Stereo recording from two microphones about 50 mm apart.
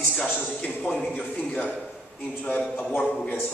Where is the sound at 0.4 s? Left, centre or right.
Left.